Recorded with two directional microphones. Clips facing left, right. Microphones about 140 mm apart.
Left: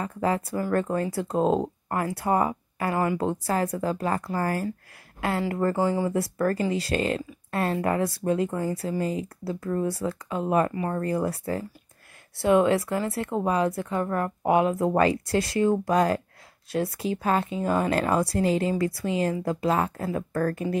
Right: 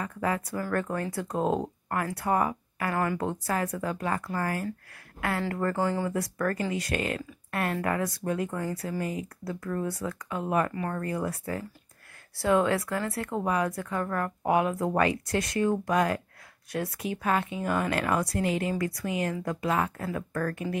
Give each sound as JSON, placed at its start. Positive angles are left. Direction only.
{"t": 0.0, "sound": "speech", "side_deg": 30}
{"t": 5.6, "sound": "speech", "side_deg": 20}
{"t": 6.1, "sound": "speech", "side_deg": 25}
{"t": 12.4, "sound": "speech", "side_deg": 20}